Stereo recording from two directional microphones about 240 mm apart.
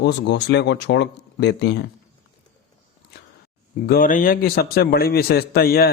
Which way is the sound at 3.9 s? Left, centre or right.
Left.